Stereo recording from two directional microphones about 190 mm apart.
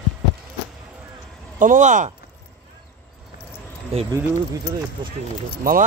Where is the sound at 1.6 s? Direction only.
40° right (ahead or behind).